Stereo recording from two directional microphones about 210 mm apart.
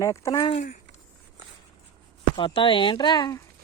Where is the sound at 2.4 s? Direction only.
25° left (ahead or behind).